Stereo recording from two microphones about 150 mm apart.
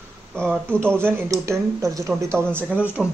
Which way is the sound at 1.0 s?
20° right (ahead or behind).